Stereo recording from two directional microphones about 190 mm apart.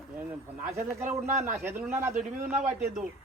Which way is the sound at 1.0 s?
35° right (ahead or behind).